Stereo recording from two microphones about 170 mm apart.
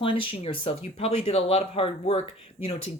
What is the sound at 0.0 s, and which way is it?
Speech, 30° left (ahead or behind).